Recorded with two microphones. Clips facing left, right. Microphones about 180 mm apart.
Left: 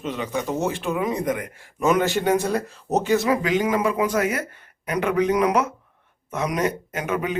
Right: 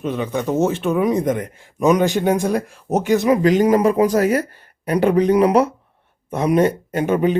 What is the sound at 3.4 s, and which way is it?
Speech, 40° right (ahead or behind).